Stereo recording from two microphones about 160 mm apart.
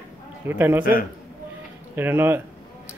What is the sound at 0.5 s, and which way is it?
Speech, 15° right (ahead or behind).